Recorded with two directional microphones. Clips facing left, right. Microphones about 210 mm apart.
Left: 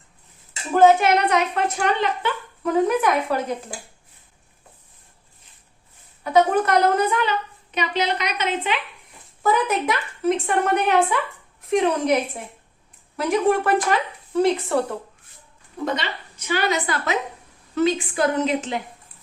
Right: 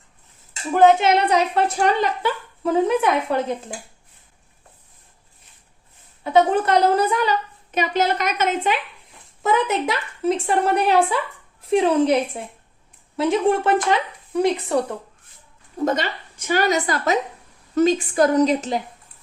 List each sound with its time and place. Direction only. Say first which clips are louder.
0.7 s a woman's voice: even; 20° right (ahead or behind); by 2.3 s 40° right (ahead or behind)
2.8 s speech: right 1 dB; 25° right (ahead or behind)
6.3 s a woman's voice: right 1 dB; 30° right (ahead or behind); by 8.8 s 45° right (ahead or behind)
9.4 s a woman's voice: right 1 dB; 25° right (ahead or behind)
13.1 s speech: right 1 dB; 25° right (ahead or behind)
15.8 s a woman's voice: right 4 dB; 45° right (ahead or behind)